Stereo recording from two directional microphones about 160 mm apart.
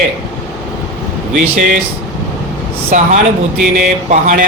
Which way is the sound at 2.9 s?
50° right (ahead or behind).